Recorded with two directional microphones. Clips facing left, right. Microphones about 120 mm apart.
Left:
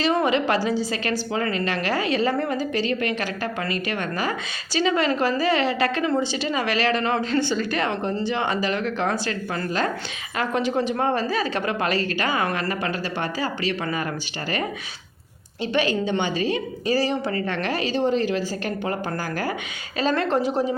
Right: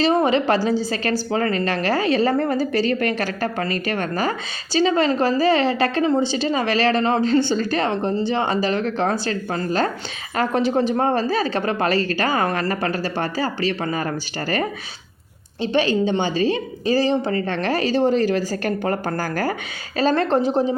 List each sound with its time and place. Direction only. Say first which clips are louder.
0.0 s a woman's voice: right 3 dB; 35° right (ahead or behind)
15.6 s a woman's voice: right 4 dB; 30° right (ahead or behind)
20.0 s a woman's voice: right 4 dB; 35° right (ahead or behind)